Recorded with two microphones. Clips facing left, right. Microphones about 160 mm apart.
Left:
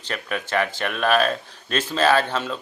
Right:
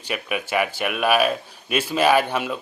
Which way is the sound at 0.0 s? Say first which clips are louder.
Right 2 dB; 10° right (ahead or behind).